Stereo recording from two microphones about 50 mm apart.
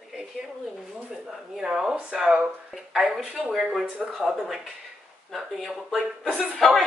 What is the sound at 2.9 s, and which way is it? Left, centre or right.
Speech, centre.